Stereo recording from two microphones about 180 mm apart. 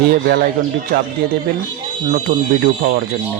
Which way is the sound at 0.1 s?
55° right (ahead or behind).